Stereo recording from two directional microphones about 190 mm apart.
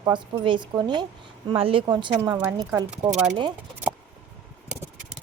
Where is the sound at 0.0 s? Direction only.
25° right (ahead or behind).